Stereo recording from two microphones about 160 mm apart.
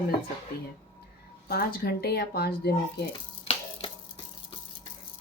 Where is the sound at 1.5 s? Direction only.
70° left (ahead or behind).